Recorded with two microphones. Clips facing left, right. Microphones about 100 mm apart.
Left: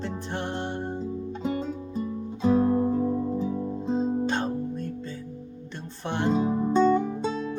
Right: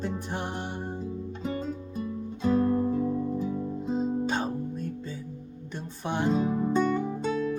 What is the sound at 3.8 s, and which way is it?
Music, 5° right (ahead or behind).